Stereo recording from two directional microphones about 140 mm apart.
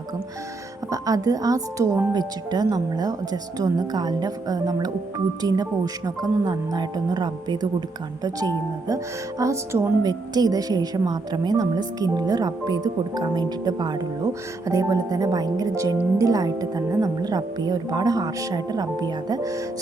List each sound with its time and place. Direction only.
0.9 s a woman's voice: 25° right (ahead or behind)